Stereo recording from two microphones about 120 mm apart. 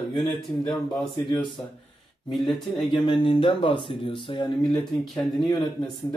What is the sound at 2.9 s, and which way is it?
Speech, 45° left (ahead or behind).